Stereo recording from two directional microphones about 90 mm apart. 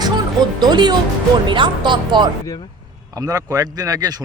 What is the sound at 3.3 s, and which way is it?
Speech, 40° right (ahead or behind).